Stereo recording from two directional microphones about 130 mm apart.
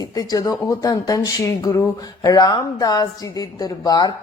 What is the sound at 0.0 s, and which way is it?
A woman's voice, 30° left (ahead or behind).